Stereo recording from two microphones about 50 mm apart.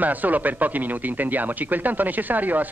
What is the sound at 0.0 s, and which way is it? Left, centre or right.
Speech, right.